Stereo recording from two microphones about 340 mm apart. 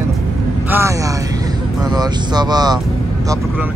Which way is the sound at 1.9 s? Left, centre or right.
Centre.